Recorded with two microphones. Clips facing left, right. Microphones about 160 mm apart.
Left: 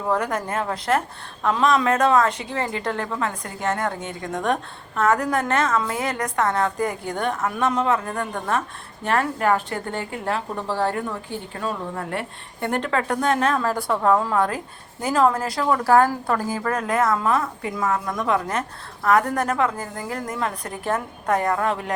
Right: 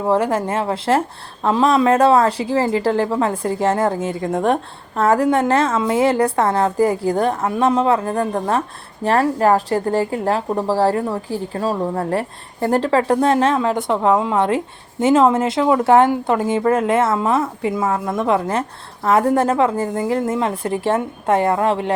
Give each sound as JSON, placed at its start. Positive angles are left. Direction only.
{"t": 0.0, "sound": "a woman's voice", "side_deg": -30}